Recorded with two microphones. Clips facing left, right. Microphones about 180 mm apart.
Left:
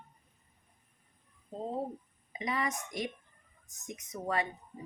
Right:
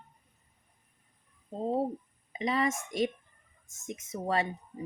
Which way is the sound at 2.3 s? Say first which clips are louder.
Right 5 dB; 25° right (ahead or behind).